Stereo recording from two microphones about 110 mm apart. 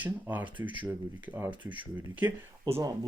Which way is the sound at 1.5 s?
45° right (ahead or behind).